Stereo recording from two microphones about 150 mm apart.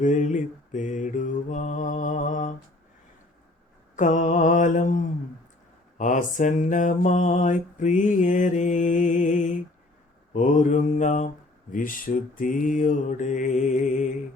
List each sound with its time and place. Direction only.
0.0 s mantra: 55° left (ahead or behind)
3.9 s mantra: 55° left (ahead or behind)
11.7 s mantra: 65° left (ahead or behind)